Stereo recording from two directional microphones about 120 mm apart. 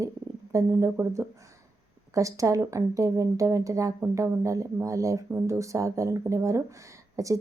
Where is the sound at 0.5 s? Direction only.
25° right (ahead or behind).